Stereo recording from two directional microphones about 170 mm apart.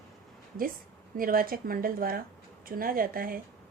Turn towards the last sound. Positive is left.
turn(degrees=-60)  # may be behind; listen again after turning